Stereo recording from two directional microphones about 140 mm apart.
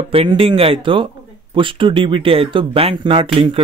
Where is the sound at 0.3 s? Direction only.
40° right (ahead or behind).